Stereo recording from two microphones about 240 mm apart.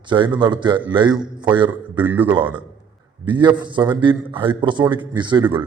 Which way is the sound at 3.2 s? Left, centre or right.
Centre.